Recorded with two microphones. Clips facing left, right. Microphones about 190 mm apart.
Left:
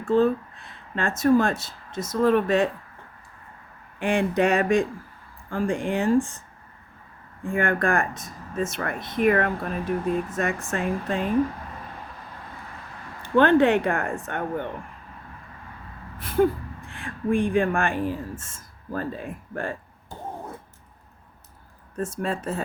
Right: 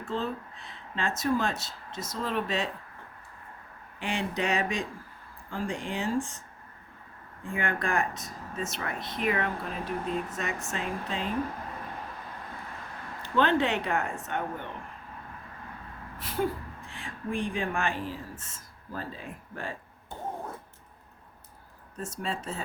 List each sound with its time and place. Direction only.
0.1 s speech: 50° left (ahead or behind)
4.0 s speech: 50° left (ahead or behind)
7.4 s speech: 50° left (ahead or behind)
13.2 s speech: 50° left (ahead or behind)
16.2 s speech: 55° left (ahead or behind)
21.9 s speech: 50° left (ahead or behind)